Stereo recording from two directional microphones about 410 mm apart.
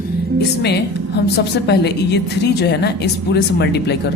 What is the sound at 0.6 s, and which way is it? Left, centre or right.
A woman's voice, left.